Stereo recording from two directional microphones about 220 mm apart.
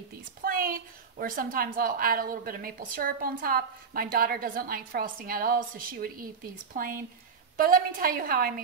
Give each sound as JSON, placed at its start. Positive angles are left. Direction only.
{"t": 0.4, "sound": "a woman's voice", "side_deg": -40}